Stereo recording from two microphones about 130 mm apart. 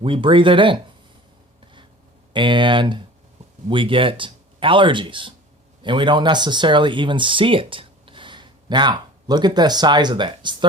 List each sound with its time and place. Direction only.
0.0 s speech: 40° right (ahead or behind)
2.3 s speech: 40° right (ahead or behind)